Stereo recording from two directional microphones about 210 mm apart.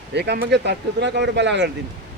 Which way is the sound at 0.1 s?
55° right (ahead or behind).